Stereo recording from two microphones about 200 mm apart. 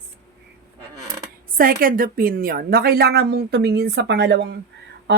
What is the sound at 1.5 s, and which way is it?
A woman's voice, 45° right (ahead or behind).